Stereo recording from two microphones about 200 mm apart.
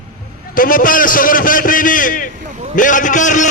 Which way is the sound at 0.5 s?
45° left (ahead or behind).